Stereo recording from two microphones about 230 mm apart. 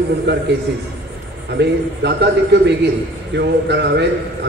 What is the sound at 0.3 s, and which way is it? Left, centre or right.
Speech, right.